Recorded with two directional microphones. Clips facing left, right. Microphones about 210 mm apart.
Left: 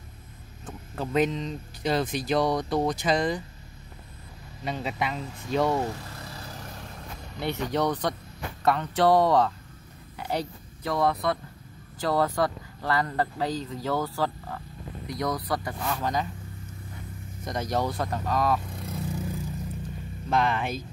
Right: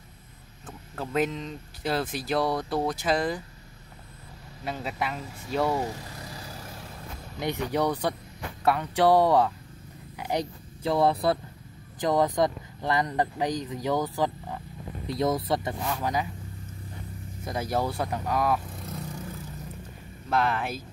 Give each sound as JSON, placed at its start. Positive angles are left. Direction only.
{"t": 1.0, "sound": "speech", "side_deg": -5}
{"t": 4.6, "sound": "speech", "side_deg": -5}
{"t": 12.0, "sound": "speech", "side_deg": -15}
{"t": 15.8, "sound": "speech", "side_deg": -10}
{"t": 17.5, "sound": "speech", "side_deg": -5}
{"t": 20.2, "sound": "speech", "side_deg": -5}